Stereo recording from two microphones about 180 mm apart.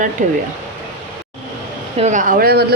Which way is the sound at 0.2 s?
45° right (ahead or behind).